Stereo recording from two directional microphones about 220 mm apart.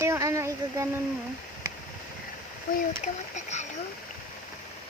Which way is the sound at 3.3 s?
30° left (ahead or behind).